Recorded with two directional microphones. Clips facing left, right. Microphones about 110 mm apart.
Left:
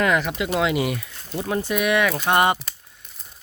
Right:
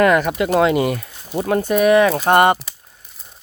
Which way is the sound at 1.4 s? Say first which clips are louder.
Right 6 dB; 55° right (ahead or behind).